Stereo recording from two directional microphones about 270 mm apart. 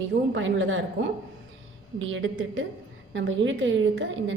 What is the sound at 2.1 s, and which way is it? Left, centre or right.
A woman's voice, right.